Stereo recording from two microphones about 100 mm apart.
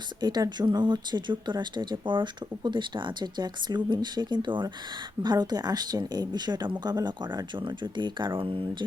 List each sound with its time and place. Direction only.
0.2 s speech: 45° right (ahead or behind)
8.4 s speech: 60° right (ahead or behind)